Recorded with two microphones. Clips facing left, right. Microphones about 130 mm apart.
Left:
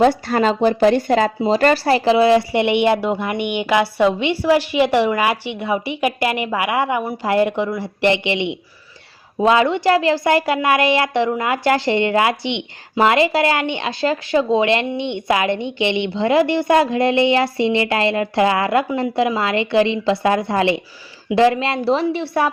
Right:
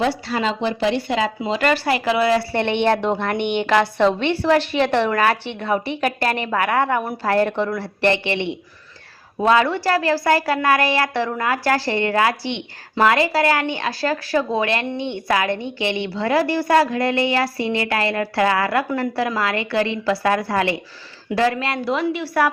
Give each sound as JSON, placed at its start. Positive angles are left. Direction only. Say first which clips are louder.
{"t": 0.0, "sound": "a woman's voice", "louder": "left 6 dB", "side_deg": 50}